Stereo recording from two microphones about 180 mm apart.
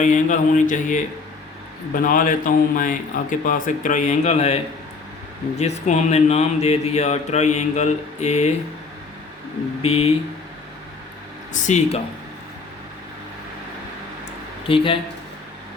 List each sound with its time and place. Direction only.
0.0 s speech: 45° left (ahead or behind)
9.8 s speech: 35° left (ahead or behind)
11.5 s speech: 40° left (ahead or behind)
14.7 s speech: 30° left (ahead or behind)